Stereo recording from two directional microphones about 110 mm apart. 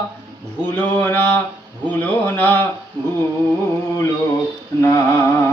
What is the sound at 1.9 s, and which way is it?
Music, 15° left (ahead or behind).